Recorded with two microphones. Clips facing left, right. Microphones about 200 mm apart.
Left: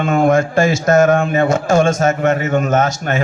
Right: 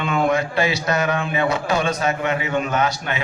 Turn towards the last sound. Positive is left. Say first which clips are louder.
# left 6 dB
turn(degrees=45)  # may be behind; listen again after turning